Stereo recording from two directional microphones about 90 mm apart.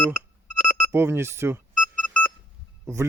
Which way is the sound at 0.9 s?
30° right (ahead or behind).